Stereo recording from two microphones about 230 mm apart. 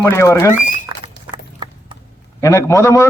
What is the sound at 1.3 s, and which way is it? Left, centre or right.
Clip-clop, right.